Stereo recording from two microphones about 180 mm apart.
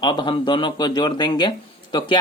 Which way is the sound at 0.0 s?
25° left (ahead or behind).